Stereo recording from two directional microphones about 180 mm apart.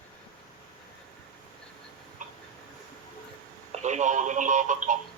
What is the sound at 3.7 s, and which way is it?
Telephone, 40° right (ahead or behind).